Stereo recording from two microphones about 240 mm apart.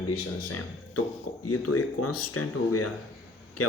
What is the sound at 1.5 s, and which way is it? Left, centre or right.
Speech, left.